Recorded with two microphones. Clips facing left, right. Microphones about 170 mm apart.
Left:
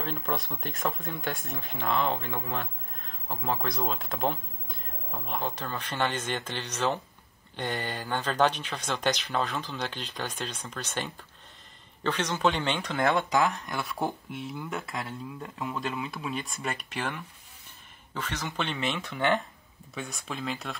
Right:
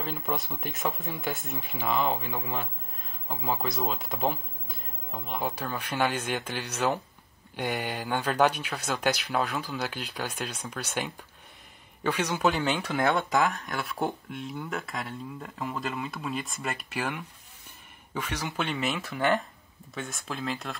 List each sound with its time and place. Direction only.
0.0 s speech: 5° right (ahead or behind)